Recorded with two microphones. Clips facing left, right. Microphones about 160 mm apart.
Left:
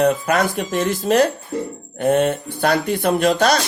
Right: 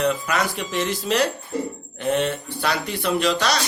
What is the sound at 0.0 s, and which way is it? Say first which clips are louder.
Speech: left 5 dB; 50° left (ahead or behind).